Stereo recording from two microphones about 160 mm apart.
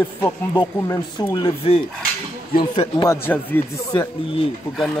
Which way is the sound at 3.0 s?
15° left (ahead or behind).